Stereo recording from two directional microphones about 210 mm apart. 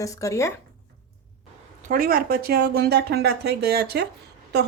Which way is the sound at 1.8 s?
40° right (ahead or behind).